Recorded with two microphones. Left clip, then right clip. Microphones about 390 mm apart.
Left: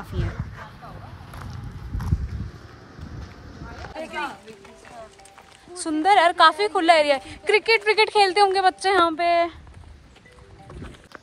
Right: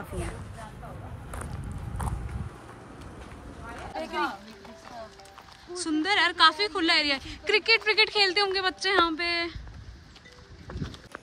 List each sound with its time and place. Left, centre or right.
0.1 s a woman's voice: centre
3.9 s speech: right
5.8 s a woman's voice: centre